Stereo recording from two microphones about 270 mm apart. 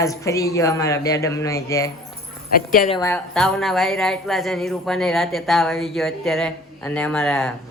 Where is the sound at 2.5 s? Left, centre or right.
Left.